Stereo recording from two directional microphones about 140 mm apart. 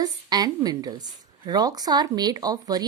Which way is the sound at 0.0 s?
30° right (ahead or behind).